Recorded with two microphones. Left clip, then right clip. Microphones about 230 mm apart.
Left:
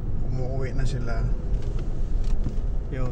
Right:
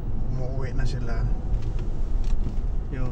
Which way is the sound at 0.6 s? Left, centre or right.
Centre.